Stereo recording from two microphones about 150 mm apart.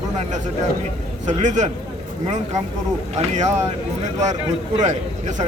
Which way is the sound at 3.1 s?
50° right (ahead or behind).